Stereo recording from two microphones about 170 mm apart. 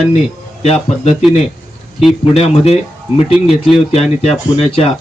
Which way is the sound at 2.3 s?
40° left (ahead or behind).